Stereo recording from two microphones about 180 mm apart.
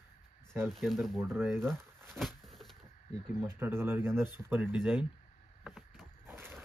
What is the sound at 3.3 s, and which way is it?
Speech, 15° right (ahead or behind).